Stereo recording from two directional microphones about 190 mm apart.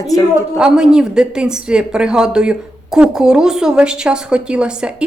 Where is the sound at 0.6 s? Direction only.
5° right (ahead or behind).